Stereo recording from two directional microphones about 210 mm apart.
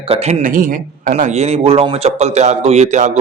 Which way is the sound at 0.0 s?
30° right (ahead or behind).